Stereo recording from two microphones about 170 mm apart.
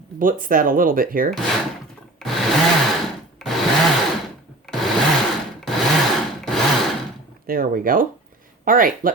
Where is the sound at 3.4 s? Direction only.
Centre (ahead or behind).